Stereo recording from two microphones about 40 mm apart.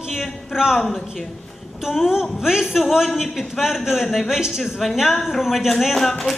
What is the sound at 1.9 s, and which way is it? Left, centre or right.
A woman's voice, centre.